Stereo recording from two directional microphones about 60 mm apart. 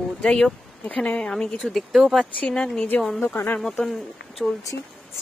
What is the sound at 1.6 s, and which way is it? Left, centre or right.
Speech, centre.